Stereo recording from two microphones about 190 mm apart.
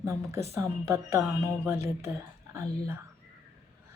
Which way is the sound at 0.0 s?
15° right (ahead or behind).